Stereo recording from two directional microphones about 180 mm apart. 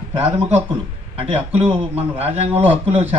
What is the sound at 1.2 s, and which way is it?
A man's voice, 30° right (ahead or behind).